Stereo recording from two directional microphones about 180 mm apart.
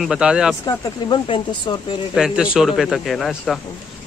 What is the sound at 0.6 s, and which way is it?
Speech, 25° left (ahead or behind).